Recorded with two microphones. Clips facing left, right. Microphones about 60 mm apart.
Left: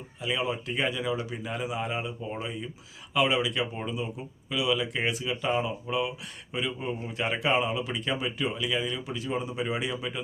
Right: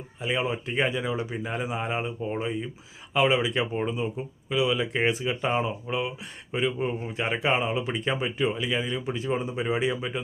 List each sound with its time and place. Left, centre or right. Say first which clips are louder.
0.2 s speech: right 2 dB; right